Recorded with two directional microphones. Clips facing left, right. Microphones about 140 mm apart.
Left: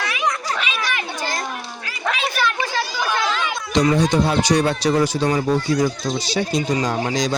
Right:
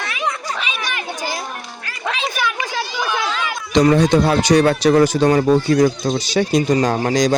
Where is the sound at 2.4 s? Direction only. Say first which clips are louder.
Left 1 dB; 10° right (ahead or behind).